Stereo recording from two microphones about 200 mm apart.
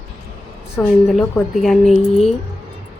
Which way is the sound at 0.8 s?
10° left (ahead or behind).